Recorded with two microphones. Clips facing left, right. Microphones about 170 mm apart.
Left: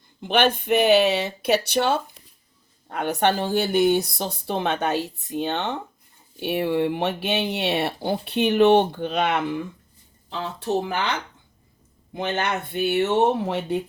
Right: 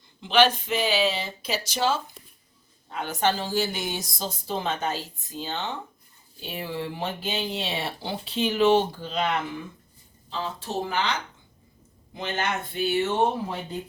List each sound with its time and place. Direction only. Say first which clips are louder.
0.2 s speech: even; 55° left (ahead or behind)